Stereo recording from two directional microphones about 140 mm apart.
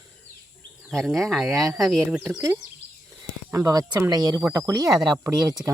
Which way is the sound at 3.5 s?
25° right (ahead or behind).